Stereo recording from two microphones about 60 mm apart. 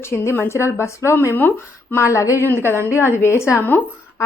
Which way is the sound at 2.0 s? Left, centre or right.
Left.